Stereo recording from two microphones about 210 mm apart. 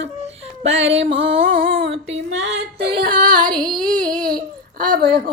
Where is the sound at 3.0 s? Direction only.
40° right (ahead or behind).